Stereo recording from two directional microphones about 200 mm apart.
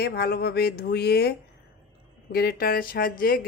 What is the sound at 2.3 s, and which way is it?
Speech, 50° left (ahead or behind).